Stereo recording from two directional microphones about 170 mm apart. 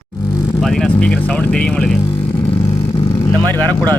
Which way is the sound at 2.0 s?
15° left (ahead or behind).